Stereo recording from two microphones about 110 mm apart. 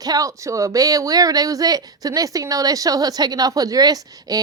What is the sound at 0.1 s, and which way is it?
Speech, 30° right (ahead or behind).